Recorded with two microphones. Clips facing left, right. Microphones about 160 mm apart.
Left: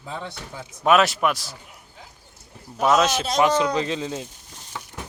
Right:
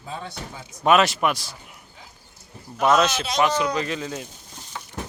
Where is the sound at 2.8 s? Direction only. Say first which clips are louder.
Even; 5° left (ahead or behind).